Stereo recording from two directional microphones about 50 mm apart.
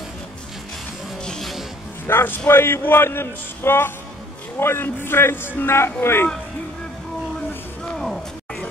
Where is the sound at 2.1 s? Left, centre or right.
Left.